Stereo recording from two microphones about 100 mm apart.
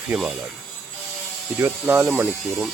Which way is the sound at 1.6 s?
25° right (ahead or behind).